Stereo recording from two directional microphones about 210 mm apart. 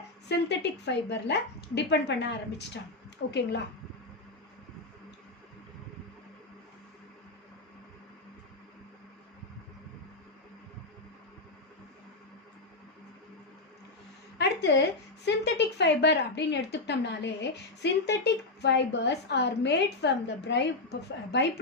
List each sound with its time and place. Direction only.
0.3 s speech: 55° left (ahead or behind)
14.3 s a woman's voice: 55° left (ahead or behind)